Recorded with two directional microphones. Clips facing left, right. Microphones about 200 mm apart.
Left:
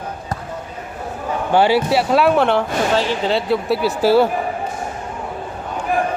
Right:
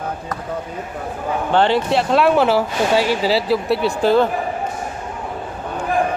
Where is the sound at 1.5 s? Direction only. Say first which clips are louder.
Left 2 dB; 10° left (ahead or behind).